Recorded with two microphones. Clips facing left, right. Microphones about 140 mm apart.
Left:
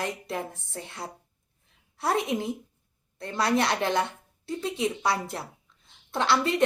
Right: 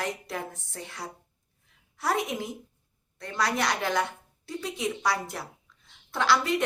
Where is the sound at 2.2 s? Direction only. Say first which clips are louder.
Left 5 dB; 25° left (ahead or behind).